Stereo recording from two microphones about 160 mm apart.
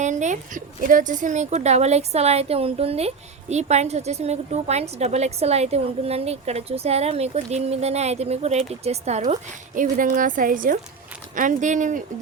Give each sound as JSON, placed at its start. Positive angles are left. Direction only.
{"t": 0.0, "sound": "a woman's voice", "side_deg": -50}